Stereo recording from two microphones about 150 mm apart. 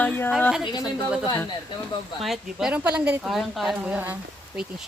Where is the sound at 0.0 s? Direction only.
5° left (ahead or behind).